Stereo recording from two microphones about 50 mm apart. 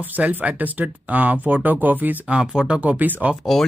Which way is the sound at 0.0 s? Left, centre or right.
Right.